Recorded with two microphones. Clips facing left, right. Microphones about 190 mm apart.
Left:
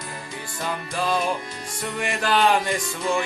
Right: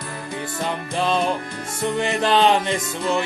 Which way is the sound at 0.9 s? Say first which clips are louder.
Right 3 dB; 25° right (ahead or behind).